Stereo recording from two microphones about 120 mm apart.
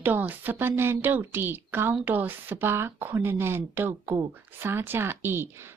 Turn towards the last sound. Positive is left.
turn(degrees=-20)  # may be behind; listen again after turning